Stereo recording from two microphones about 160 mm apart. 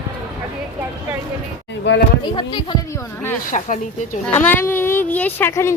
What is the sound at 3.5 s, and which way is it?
Speech, 50° left (ahead or behind).